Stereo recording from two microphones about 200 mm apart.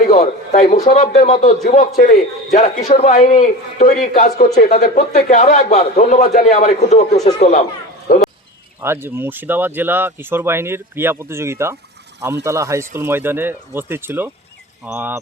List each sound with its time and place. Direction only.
0.1 s a sound: 35° left (ahead or behind)
0.9 s a man's voice: 35° left (ahead or behind)
2.6 s a man's voice: 35° left (ahead or behind)
8.1 s speech: 45° left (ahead or behind)
8.8 s speech: 10° right (ahead or behind)